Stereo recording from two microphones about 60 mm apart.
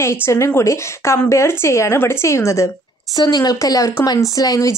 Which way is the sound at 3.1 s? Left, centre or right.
Left.